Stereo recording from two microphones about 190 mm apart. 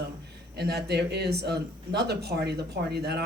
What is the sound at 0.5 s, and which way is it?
Speech, 60° right (ahead or behind).